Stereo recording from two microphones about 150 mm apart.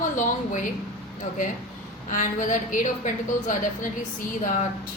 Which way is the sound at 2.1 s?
60° left (ahead or behind).